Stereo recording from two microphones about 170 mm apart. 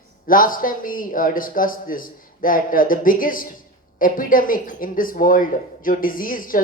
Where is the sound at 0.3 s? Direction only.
55° left (ahead or behind).